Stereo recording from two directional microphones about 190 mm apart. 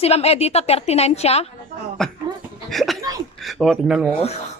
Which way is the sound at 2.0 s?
5° left (ahead or behind).